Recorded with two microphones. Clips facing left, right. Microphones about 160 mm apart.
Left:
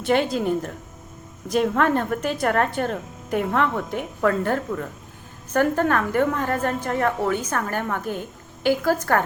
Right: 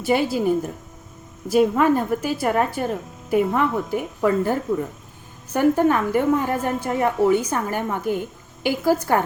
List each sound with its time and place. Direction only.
0.0 s a woman's voice: 5° right (ahead or behind)